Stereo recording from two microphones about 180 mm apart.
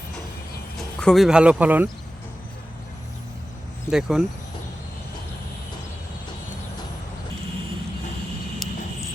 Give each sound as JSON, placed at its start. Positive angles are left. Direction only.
{"t": 0.8, "sound": "speech", "side_deg": 5}
{"t": 3.8, "sound": "speech", "side_deg": 0}